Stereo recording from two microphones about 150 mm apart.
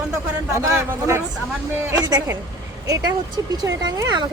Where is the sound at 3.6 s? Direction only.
25° right (ahead or behind).